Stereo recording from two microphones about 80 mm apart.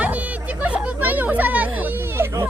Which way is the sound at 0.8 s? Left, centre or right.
Right.